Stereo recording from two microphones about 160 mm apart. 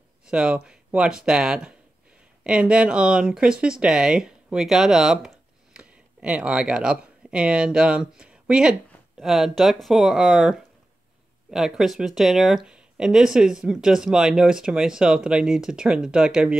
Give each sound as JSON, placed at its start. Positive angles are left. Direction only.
{"t": 0.3, "sound": "speech", "side_deg": -5}